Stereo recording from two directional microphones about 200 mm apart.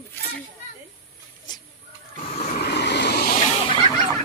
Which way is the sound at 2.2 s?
35° left (ahead or behind).